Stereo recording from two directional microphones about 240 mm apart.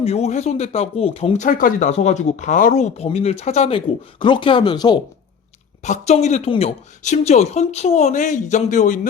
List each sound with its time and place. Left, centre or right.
0.0 s speech: left
5.8 s speech: left